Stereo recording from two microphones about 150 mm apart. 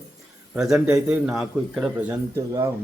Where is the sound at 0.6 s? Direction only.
5° right (ahead or behind).